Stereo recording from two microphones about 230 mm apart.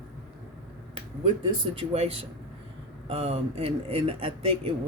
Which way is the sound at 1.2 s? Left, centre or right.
Right.